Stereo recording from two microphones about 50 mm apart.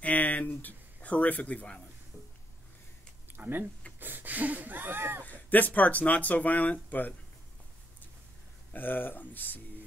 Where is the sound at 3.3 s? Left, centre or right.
Right.